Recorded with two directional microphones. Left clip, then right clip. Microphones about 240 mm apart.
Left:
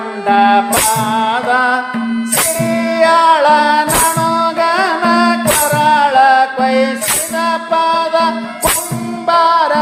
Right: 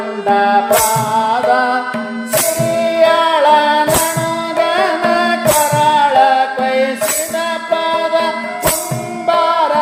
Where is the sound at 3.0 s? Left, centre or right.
Left.